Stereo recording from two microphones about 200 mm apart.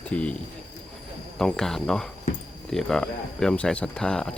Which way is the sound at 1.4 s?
Centre (ahead or behind).